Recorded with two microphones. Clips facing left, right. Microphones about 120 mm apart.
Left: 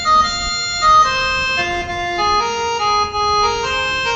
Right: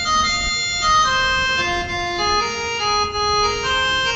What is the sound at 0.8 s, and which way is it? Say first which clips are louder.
Organ: left 5 dB; 55° left (ahead or behind).